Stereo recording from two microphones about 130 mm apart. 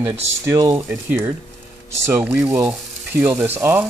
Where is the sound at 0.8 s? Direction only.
15° right (ahead or behind).